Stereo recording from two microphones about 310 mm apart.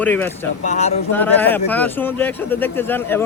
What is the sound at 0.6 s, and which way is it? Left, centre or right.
Speech, left.